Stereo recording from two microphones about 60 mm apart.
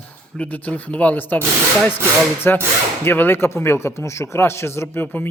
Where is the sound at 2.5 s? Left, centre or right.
Left.